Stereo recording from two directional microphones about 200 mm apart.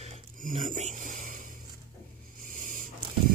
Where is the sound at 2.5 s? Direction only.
40° right (ahead or behind).